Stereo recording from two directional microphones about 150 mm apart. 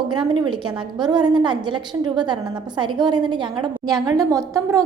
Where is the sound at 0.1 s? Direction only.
30° right (ahead or behind).